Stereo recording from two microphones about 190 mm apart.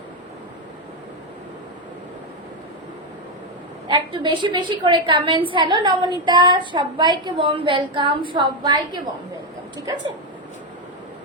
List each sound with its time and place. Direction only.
3.8 s a woman's voice: 25° right (ahead or behind)